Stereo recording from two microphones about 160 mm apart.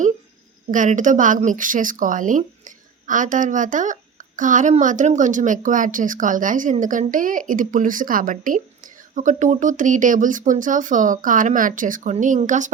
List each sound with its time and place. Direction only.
0.7 s a woman's voice: 55° right (ahead or behind)